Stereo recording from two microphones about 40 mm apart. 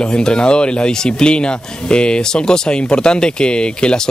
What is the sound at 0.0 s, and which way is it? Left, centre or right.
Speech, centre.